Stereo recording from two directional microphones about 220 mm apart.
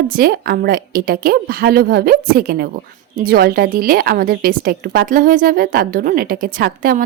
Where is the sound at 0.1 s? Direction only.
45° right (ahead or behind).